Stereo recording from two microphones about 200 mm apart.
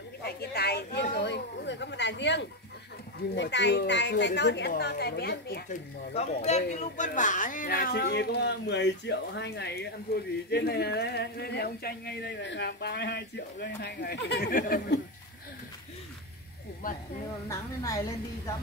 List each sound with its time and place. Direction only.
0.2 s a woman's voice: 55° left (ahead or behind)
6.1 s speech: 35° left (ahead or behind); by 15.0 s 50° left (ahead or behind)
16.8 s speech: 45° left (ahead or behind)
17.5 s a woman's voice: 15° left (ahead or behind)